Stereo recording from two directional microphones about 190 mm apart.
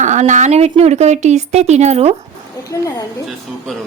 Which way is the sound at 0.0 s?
40° right (ahead or behind).